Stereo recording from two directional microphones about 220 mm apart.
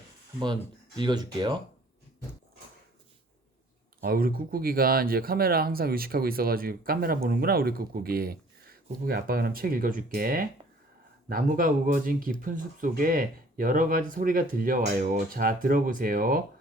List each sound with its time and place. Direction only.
0.9 s speech: 20° right (ahead or behind)
4.0 s speech: 40° right (ahead or behind)